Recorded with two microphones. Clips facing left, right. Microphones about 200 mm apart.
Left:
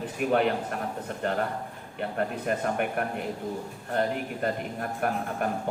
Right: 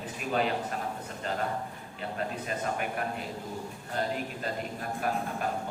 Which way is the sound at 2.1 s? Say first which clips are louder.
Left 5 dB; 60° left (ahead or behind).